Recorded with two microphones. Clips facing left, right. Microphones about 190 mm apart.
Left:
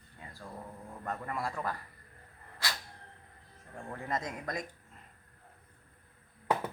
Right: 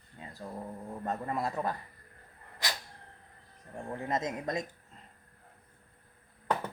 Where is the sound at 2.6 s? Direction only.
20° right (ahead or behind).